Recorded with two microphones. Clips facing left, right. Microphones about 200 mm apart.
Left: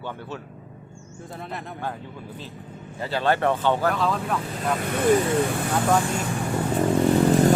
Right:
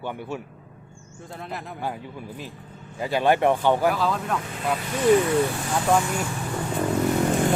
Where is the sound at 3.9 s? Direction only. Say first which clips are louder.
Even; centre (ahead or behind).